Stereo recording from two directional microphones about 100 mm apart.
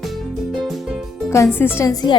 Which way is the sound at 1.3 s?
25° left (ahead or behind).